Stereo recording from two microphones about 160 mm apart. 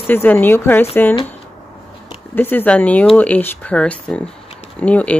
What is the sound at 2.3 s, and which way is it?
A woman's voice, 10° left (ahead or behind).